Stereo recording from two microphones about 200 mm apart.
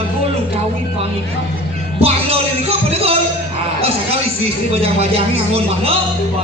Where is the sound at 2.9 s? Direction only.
30° right (ahead or behind).